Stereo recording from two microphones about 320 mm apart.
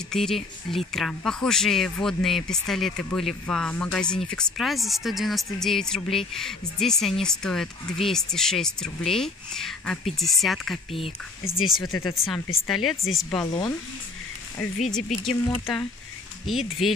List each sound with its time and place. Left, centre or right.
0.1 s a woman's voice: centre
10.9 s speech: centre
11.4 s a woman's voice: centre
14.6 s a woman's voice: centre